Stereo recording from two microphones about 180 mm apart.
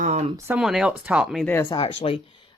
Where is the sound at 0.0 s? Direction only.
40° right (ahead or behind).